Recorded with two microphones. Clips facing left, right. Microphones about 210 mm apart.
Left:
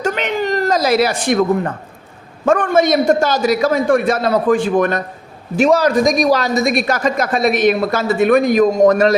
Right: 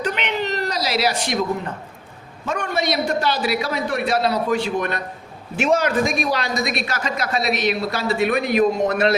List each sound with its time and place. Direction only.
0.0 s chuckle: 45° left (ahead or behind)
2.4 s a man's voice: 50° left (ahead or behind)